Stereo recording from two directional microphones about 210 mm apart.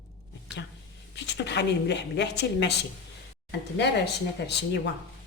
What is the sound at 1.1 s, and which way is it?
A woman's voice, 55° left (ahead or behind).